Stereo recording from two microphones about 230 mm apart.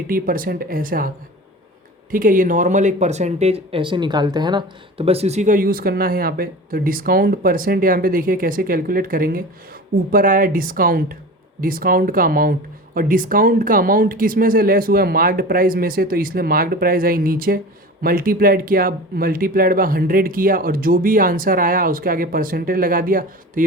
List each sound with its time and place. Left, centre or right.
0.1 s speech: right